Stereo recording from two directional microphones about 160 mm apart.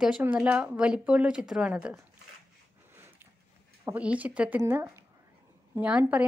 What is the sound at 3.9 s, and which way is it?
Speech, 10° right (ahead or behind).